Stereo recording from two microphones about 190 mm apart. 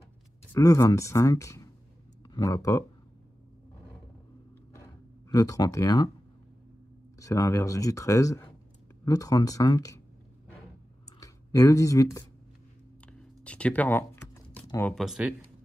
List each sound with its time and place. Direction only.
0.5 s speech: 15° left (ahead or behind)
5.3 s speech: 20° left (ahead or behind)
7.2 s speech: 15° left (ahead or behind)
11.1 s speech: 20° left (ahead or behind)
13.0 s computer keyboard: 5° left (ahead or behind)
15.0 s speech: 5° right (ahead or behind)